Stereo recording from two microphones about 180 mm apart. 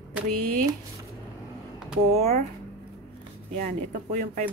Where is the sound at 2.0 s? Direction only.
40° right (ahead or behind).